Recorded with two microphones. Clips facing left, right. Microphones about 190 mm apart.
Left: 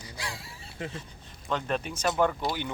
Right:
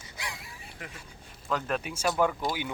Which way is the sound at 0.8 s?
25° left (ahead or behind).